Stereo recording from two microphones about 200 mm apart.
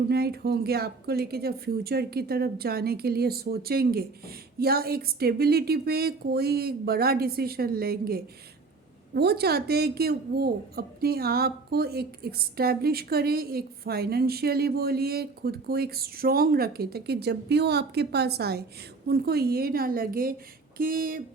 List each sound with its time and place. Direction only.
0.1 s a woman's voice: 50° right (ahead or behind)